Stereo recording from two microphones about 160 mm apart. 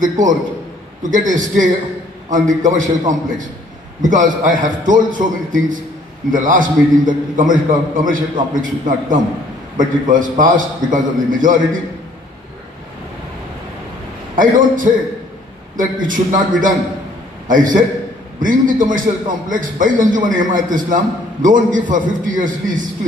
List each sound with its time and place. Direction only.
0.0 s a man's voice: 55° right (ahead or behind)
14.3 s a man's voice: 55° right (ahead or behind)
16.0 s a man's voice: 55° right (ahead or behind)